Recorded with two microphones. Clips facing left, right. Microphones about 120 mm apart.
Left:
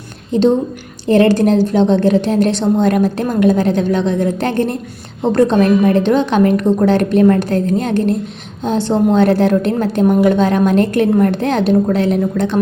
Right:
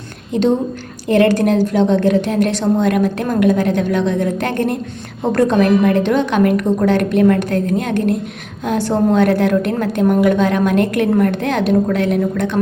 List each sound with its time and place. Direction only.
1.0 s a woman's voice: 30° left (ahead or behind)